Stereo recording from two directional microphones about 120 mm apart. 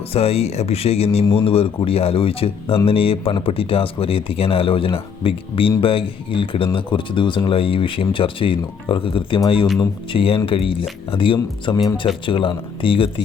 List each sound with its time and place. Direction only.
0.1 s speech: 55° left (ahead or behind)